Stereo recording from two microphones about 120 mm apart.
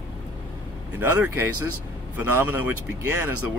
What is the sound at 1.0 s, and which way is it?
Speech, 20° right (ahead or behind).